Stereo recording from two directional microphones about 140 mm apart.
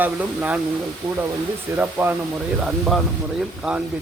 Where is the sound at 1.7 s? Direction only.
15° right (ahead or behind).